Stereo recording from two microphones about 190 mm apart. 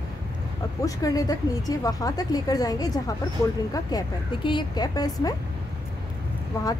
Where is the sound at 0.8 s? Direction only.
20° left (ahead or behind).